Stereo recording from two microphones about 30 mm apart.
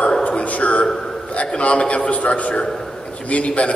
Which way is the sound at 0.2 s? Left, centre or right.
Left.